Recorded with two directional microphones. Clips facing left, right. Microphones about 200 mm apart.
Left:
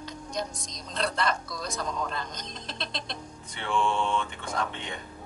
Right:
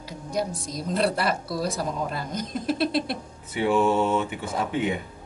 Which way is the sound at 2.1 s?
5° right (ahead or behind).